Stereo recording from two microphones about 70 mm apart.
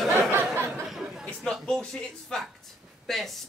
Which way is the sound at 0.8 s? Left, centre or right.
Centre.